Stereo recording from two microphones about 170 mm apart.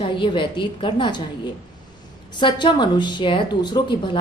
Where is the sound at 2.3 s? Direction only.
25° left (ahead or behind).